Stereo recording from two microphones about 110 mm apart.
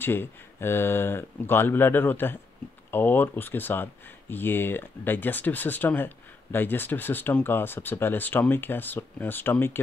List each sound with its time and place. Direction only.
0.0 s speech: 20° left (ahead or behind)